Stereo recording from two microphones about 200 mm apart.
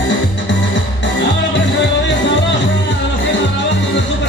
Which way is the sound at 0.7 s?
60° left (ahead or behind).